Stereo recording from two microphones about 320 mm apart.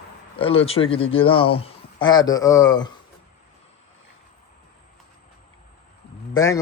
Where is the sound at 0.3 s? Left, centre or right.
Centre.